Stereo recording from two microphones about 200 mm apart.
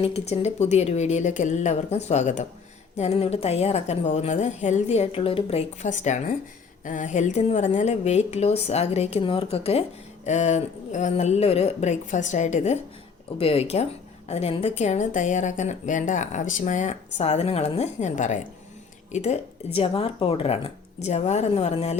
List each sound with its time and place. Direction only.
0.0 s a woman's voice: 30° left (ahead or behind)